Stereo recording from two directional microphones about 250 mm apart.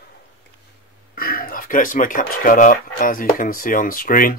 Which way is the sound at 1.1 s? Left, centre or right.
Left.